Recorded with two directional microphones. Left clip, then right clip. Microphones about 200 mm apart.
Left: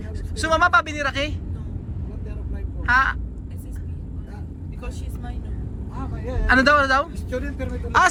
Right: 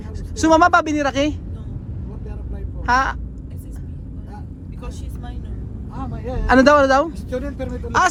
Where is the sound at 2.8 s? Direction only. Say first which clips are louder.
Right 1 dB; 35° right (ahead or behind).